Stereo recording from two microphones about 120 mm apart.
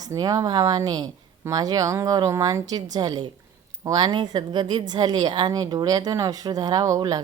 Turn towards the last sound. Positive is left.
turn(degrees=-30)  # may be behind; listen again after turning